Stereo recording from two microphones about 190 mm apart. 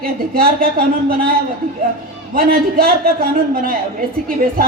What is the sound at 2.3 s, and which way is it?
Speech, 50° right (ahead or behind).